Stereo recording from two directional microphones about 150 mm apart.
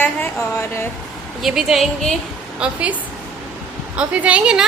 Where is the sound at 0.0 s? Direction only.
15° left (ahead or behind).